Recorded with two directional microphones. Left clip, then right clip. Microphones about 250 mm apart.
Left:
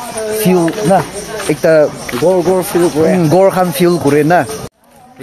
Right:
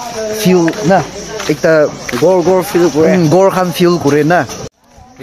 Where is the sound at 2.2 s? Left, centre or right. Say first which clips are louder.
Right 2 dB; right.